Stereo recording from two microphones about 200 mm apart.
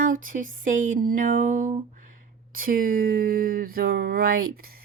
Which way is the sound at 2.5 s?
45° right (ahead or behind).